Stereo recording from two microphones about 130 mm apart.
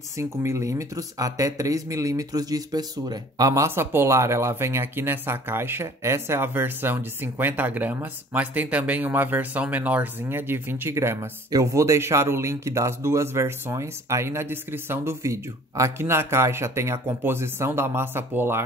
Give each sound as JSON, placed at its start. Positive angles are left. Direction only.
{"t": 0.2, "sound": "speech", "side_deg": -20}